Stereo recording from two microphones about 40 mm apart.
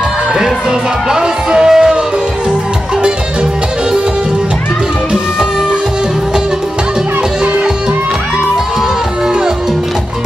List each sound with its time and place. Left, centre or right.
1.1 s music: right